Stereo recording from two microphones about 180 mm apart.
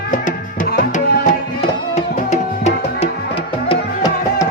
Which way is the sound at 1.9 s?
40° left (ahead or behind).